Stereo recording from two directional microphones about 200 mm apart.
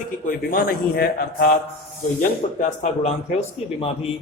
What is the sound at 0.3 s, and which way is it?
Speech, 45° left (ahead or behind).